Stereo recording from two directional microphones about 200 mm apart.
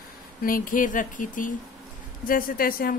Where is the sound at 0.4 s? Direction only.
45° left (ahead or behind).